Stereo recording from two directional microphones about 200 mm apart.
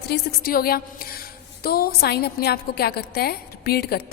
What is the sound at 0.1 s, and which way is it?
A woman's voice, 50° left (ahead or behind).